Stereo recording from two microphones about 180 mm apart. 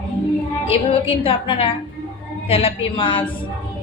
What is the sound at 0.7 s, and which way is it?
A woman's voice, 30° left (ahead or behind).